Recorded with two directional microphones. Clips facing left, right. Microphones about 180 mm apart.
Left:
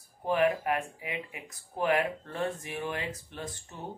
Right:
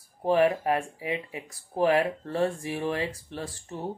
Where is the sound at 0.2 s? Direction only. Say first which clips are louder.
Right 4 dB; 35° right (ahead or behind).